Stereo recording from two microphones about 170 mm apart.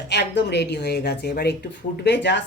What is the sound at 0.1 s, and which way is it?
A woman's voice, 85° left.